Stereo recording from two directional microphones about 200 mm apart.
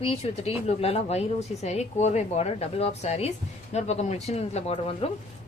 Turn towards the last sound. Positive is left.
turn(degrees=30)  # may be behind; listen again after turning